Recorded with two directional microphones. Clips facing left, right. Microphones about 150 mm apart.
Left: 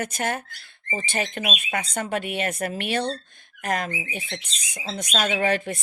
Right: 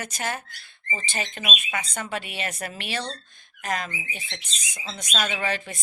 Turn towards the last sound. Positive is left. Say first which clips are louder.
# left 6 dB
turn(degrees=55)  # may be behind; listen again after turning